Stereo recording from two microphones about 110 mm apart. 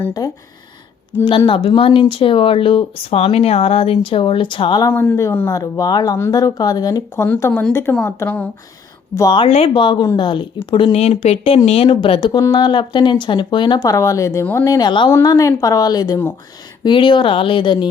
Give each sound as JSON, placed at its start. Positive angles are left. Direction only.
{"t": 0.2, "sound": "a woman's voice", "side_deg": 35}
{"t": 1.1, "sound": "speech", "side_deg": 25}
{"t": 1.5, "sound": "speech", "side_deg": 50}
{"t": 4.9, "sound": "speech", "side_deg": 15}
{"t": 5.5, "sound": "a woman's voice", "side_deg": 30}
{"t": 7.2, "sound": "speech", "side_deg": 25}
{"t": 9.5, "sound": "speech", "side_deg": 55}
{"t": 10.9, "sound": "speech", "side_deg": 70}
{"t": 11.9, "sound": "speech", "side_deg": 50}
{"t": 12.4, "sound": "speech", "side_deg": 40}
{"t": 13.7, "sound": "a woman's voice", "side_deg": 30}
{"t": 15.2, "sound": "a woman's voice", "side_deg": 35}
{"t": 16.8, "sound": "speech", "side_deg": 45}